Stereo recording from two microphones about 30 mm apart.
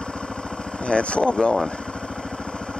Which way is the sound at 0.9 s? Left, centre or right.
Left.